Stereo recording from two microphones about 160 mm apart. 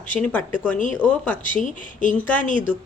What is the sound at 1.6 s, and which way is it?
Speech, 55° left (ahead or behind).